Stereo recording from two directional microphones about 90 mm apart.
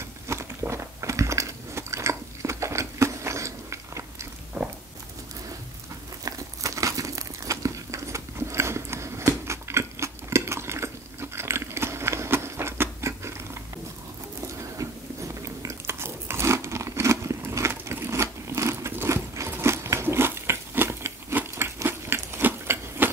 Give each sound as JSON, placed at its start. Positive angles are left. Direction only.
{"t": 0.0, "sound": "biting", "side_deg": -30}
{"t": 6.2, "sound": "crumpling", "side_deg": -35}
{"t": 14.8, "sound": "biting", "side_deg": -35}